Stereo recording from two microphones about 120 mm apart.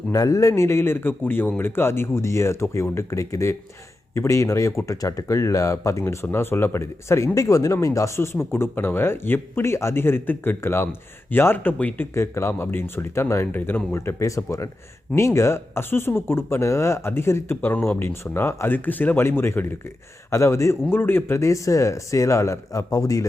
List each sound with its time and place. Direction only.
0.1 s speech: 30° left (ahead or behind)